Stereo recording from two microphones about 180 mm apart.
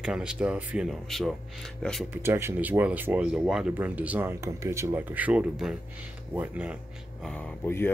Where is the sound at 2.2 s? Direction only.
15° right (ahead or behind).